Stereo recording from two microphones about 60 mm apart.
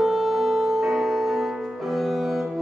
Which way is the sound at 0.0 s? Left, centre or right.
Centre.